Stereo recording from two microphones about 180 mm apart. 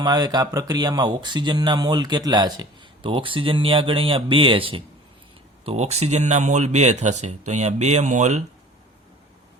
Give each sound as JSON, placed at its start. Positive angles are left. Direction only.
{"t": 0.0, "sound": "speech", "side_deg": -25}